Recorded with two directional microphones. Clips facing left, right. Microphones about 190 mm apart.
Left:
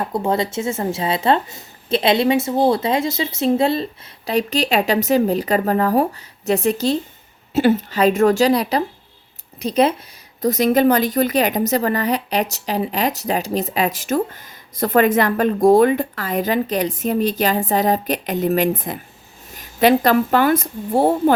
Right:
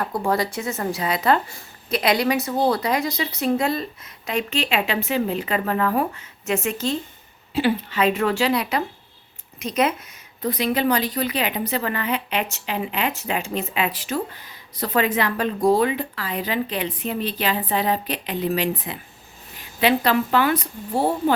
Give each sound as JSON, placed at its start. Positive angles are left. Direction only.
{"t": 0.0, "sound": "a woman's voice", "side_deg": 20}
{"t": 10.4, "sound": "a woman's voice", "side_deg": 45}